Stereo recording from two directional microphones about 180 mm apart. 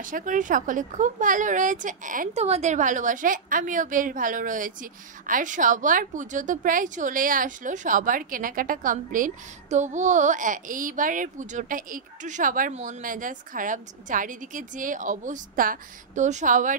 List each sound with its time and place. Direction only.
0.0 s a woman's voice: 45° right (ahead or behind)